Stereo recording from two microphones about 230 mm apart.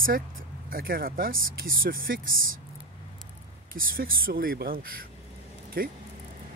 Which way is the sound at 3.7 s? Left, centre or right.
Right.